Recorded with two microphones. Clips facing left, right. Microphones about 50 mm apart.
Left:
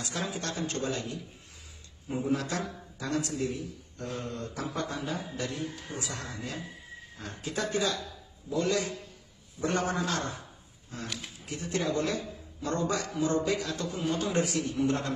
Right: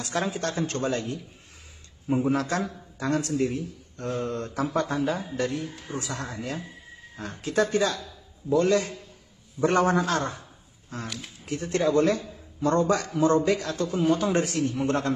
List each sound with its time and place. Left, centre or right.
0.0 s a man's voice: right
5.7 s a man's voice: right
5.9 s a man's voice: right
11.1 s speech: centre
11.4 s a man's voice: right